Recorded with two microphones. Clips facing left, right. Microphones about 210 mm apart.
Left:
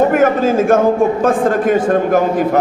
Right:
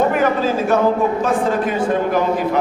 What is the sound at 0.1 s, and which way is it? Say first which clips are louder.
A man's voice: left 5 dB; 50° left (ahead or behind).